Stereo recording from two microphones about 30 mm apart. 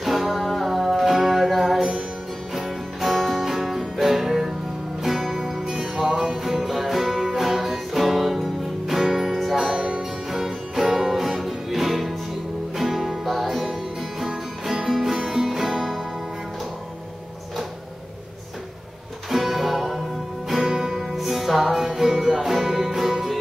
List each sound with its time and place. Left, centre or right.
0.0 s music: centre
3.1 s music: centre
3.4 s music: centre
5.7 s music: centre
9.8 s music: right
10.3 s music: centre
19.3 s music: centre
21.2 s music: centre